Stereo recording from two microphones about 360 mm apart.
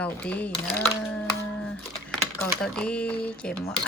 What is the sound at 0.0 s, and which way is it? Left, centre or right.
Speech, centre.